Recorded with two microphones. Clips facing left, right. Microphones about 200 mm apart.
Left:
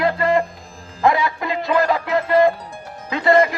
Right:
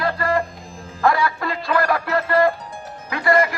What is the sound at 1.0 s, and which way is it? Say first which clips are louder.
Music: left 1 dB; 20° left (ahead or behind).